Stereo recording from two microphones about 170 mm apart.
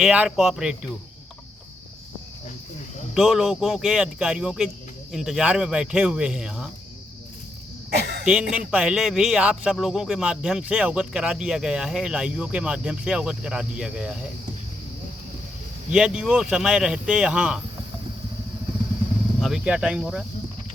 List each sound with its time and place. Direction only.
0.0 s a man's voice: 5° right (ahead or behind)
3.2 s a man's voice: centre (ahead or behind)
7.9 s cough: 75° right (ahead or behind)
8.2 s a man's voice: 5° right (ahead or behind)
15.9 s a man's voice: 5° right (ahead or behind)
19.4 s a man's voice: centre (ahead or behind)